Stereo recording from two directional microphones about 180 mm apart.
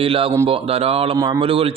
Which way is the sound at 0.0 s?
30° right (ahead or behind).